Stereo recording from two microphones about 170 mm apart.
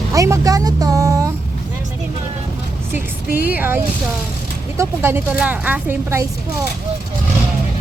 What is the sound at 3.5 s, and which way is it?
A woman's voice, 10° right (ahead or behind).